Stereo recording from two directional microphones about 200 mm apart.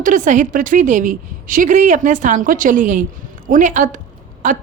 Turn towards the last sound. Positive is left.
turn(degrees=-40)  # may be behind; listen again after turning